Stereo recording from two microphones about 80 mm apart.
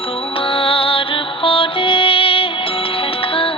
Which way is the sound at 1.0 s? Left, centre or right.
Left.